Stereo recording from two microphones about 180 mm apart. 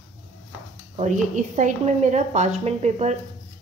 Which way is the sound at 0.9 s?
45° right (ahead or behind).